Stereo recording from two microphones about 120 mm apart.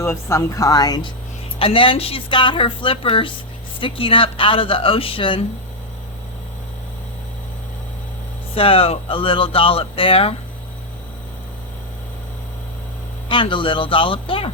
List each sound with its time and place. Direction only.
0.0 s speech: 25° left (ahead or behind)
1.5 s speech: 50° left (ahead or behind)
8.5 s speech: 50° left (ahead or behind)
13.2 s speech: 45° left (ahead or behind)